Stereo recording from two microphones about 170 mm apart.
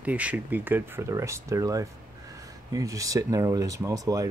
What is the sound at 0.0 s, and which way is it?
Speech, 10° right (ahead or behind).